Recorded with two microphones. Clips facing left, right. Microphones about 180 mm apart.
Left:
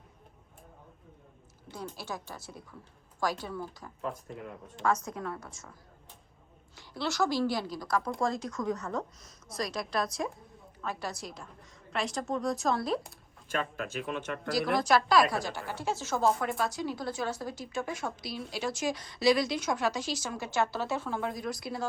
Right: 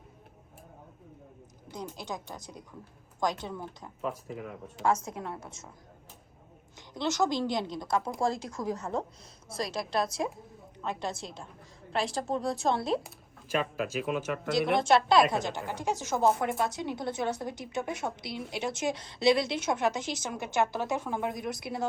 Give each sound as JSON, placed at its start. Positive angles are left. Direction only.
{"t": 1.7, "sound": "a woman's voice", "side_deg": -15}
{"t": 4.0, "sound": "speech", "side_deg": -5}
{"t": 4.9, "sound": "speech", "side_deg": -25}
{"t": 6.7, "sound": "a woman's voice", "side_deg": -20}
{"t": 13.0, "sound": "speech", "side_deg": -5}
{"t": 14.8, "sound": "speech", "side_deg": -25}